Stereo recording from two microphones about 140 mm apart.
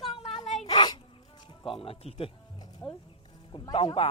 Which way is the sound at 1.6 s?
40° left (ahead or behind).